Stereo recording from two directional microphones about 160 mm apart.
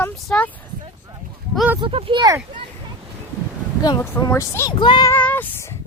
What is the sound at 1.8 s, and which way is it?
Speech, 35° right (ahead or behind).